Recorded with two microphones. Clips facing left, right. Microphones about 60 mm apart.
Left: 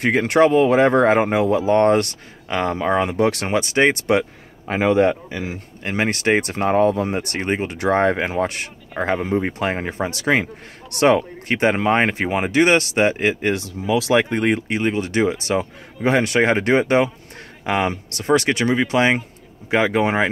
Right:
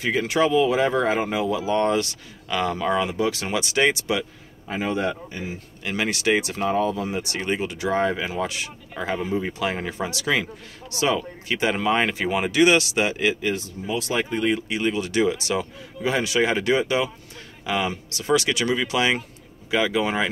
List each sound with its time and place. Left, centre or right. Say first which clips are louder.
0.0 s speech: left 6 dB; left
2.4 s speech: left 3 dB; left
3.1 s speech: left 5 dB; left
3.4 s speech: left 4 dB; left
4.1 s a sound: left 7 dB; left
5.3 s speech: left 5 dB; left
5.9 s speech: left 3 dB; left
10.9 s speech: left 7 dB; left
11.7 s speech: left 4 dB; left
13.5 s speech: left 6 dB; left
14.1 s speech: left 4 dB; left
14.8 s speech: left 3 dB; left